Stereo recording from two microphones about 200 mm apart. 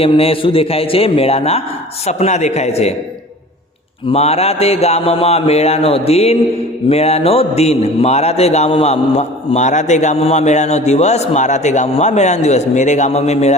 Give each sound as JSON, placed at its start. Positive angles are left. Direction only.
{"t": 0.0, "sound": "a man's voice", "side_deg": 30}
{"t": 4.1, "sound": "a man's voice", "side_deg": 30}